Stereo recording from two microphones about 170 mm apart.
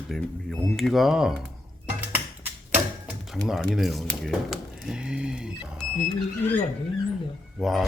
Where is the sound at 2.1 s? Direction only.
10° right (ahead or behind).